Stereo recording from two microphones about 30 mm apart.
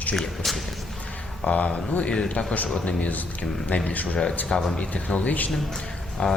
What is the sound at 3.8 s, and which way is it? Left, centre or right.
Speech, left.